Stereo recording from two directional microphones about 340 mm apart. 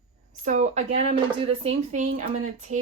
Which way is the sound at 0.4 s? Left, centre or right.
Centre.